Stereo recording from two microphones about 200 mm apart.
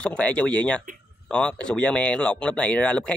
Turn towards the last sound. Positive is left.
turn(degrees=5)  # may be behind; listen again after turning